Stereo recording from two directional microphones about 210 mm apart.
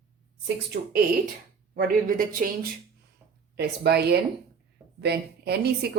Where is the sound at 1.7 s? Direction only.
40° right (ahead or behind).